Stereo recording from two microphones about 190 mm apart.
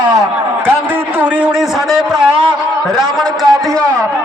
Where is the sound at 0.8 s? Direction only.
10° right (ahead or behind).